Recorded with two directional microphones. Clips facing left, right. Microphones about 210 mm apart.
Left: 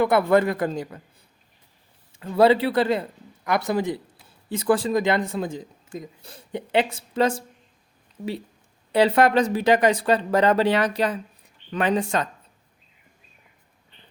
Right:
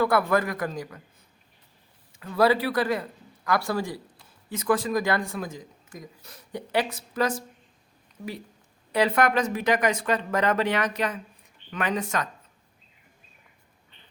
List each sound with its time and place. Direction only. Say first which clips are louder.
0.0 s speech: left 4 dB; 25° left (ahead or behind)
2.1 s a man's voice: left 4 dB; 25° left (ahead or behind)
8.9 s speech: left 5 dB; 30° left (ahead or behind)